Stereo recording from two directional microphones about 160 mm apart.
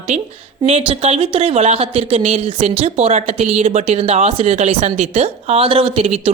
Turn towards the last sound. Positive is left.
turn(degrees=-40)  # may be behind; listen again after turning